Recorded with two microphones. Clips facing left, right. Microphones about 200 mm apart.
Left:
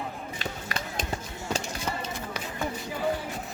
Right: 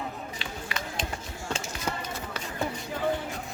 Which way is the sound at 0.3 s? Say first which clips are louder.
Left 2 dB; 40° left (ahead or behind).